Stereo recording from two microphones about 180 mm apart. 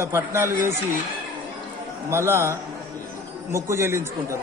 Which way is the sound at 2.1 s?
15° right (ahead or behind).